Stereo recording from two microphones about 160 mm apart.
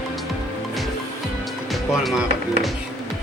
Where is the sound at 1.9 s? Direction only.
Centre (ahead or behind).